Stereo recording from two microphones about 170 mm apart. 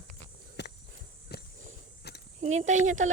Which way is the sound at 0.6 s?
80° left.